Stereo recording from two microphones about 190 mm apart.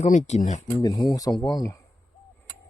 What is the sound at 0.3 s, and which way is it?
Speech, 35° left (ahead or behind).